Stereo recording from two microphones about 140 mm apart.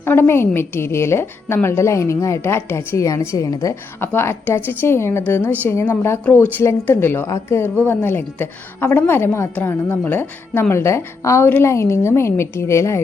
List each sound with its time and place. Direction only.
0.0 s a woman's voice: 15° left (ahead or behind)